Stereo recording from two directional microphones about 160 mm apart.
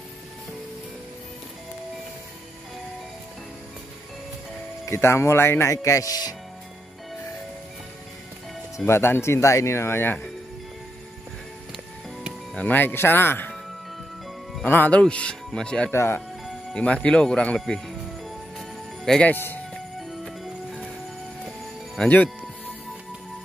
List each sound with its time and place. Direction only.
4.8 s speech: 15° left (ahead or behind)
8.8 s speech: 15° left (ahead or behind)
12.5 s speech: 10° left (ahead or behind)
18.6 s music: 5° left (ahead or behind)
20.0 s music: centre (ahead or behind)